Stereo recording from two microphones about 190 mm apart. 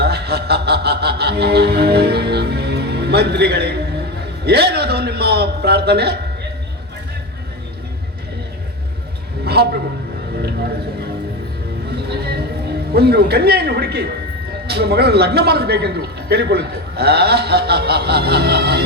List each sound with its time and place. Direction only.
0.0 s a man's voice: 60° right (ahead or behind)
9.4 s a man's voice: 55° right (ahead or behind)
12.0 s a man's voice: 55° right (ahead or behind)